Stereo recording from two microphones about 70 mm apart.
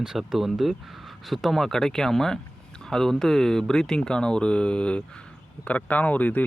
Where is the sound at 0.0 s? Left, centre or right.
Centre.